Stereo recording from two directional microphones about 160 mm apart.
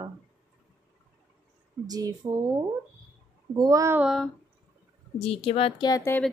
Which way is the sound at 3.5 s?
20° right (ahead or behind).